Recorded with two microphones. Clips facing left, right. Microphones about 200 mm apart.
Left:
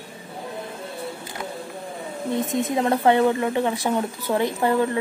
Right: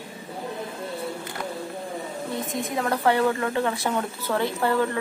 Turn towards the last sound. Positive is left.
turn(degrees=15)  # may be behind; listen again after turning